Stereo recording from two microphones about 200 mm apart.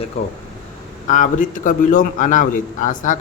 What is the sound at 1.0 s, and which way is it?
A man's voice, 40° left (ahead or behind).